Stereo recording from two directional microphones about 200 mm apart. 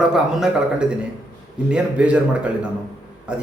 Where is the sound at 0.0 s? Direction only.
Centre (ahead or behind).